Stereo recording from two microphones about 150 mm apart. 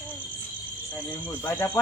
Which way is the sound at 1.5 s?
15° left (ahead or behind).